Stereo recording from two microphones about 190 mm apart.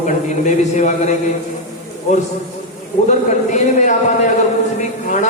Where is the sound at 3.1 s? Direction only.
40° left (ahead or behind).